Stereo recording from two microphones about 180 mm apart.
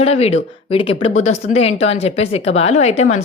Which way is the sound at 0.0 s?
35° left (ahead or behind).